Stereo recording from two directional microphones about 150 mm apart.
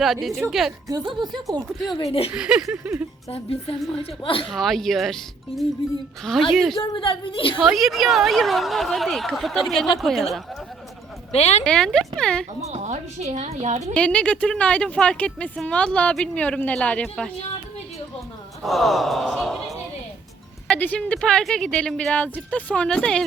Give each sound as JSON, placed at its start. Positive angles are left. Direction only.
{"t": 0.0, "sound": "a woman's voice", "side_deg": 0}
{"t": 0.9, "sound": "speech", "side_deg": -30}
{"t": 2.3, "sound": "a woman's voice", "side_deg": -5}
{"t": 3.2, "sound": "a woman's voice", "side_deg": 40}
{"t": 4.4, "sound": "a woman's voice", "side_deg": 0}
{"t": 6.7, "sound": "a woman's voice", "side_deg": 35}
{"t": 7.6, "sound": "a woman's voice", "side_deg": 0}
{"t": 11.3, "sound": "speech", "side_deg": 45}
{"t": 11.6, "sound": "a woman's voice", "side_deg": 5}
{"t": 12.7, "sound": "a woman's voice", "side_deg": -50}
{"t": 13.9, "sound": "speech", "side_deg": 5}
{"t": 18.6, "sound": "a woman's voice", "side_deg": 0}
{"t": 20.7, "sound": "speech", "side_deg": 10}